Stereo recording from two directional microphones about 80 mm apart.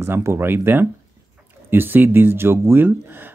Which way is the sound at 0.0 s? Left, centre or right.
Right.